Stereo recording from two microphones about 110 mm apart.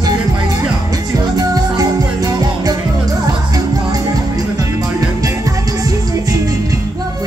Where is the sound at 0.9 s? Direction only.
35° right (ahead or behind).